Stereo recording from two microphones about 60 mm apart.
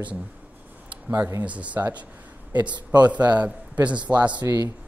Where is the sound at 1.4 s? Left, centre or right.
Right.